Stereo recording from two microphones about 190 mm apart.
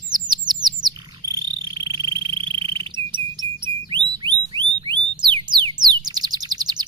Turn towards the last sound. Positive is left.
turn(degrees=-20)  # may be behind; listen again after turning